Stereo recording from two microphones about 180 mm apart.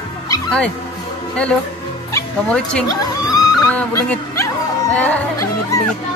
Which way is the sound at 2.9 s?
20° left (ahead or behind).